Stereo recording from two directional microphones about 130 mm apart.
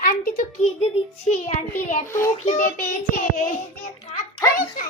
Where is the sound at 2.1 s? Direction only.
20° left (ahead or behind).